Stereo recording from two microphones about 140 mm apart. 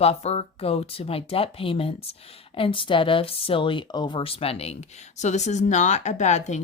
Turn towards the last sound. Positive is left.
turn(degrees=55)  # may be behind; listen again after turning